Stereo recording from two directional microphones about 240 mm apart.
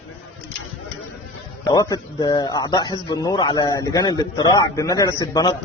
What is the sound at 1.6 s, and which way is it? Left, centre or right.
A man's voice, centre.